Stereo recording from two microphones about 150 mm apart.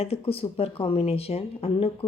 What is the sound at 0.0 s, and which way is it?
Speech, 40° left (ahead or behind).